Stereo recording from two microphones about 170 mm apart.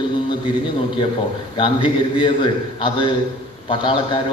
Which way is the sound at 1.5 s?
30° left (ahead or behind).